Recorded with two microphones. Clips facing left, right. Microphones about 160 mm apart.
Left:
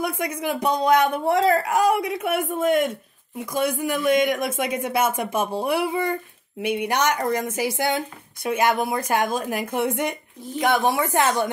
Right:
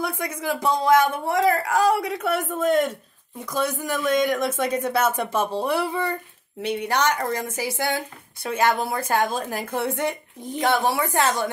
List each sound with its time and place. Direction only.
0.0 s a man's voice: 20° left (ahead or behind)